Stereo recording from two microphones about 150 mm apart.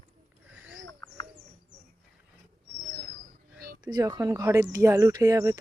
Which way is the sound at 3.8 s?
25° right (ahead or behind).